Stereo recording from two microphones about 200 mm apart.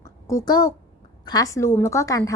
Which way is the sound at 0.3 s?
20° left (ahead or behind).